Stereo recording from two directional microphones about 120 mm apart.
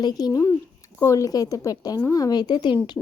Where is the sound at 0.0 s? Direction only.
35° left (ahead or behind).